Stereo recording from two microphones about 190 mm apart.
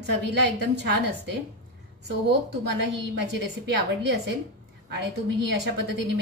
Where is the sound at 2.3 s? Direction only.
65° right (ahead or behind).